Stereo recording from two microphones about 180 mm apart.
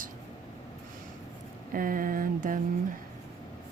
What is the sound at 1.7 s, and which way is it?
Speech, 50° right (ahead or behind).